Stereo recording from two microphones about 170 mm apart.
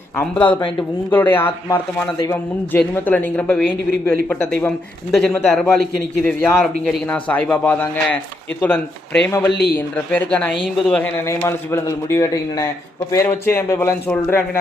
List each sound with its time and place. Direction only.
0.2 s a man's voice: 10° left (ahead or behind)
9.2 s a man's voice: 15° left (ahead or behind)
9.5 s speech: 75° left (ahead or behind)
9.7 s a man's voice: 10° left (ahead or behind)
11.3 s a man's voice: 15° left (ahead or behind)